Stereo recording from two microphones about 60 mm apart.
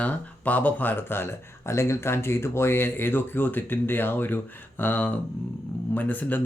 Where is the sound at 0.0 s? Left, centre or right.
Left.